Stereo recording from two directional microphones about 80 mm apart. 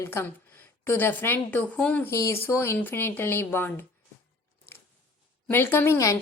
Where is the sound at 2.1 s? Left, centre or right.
Left.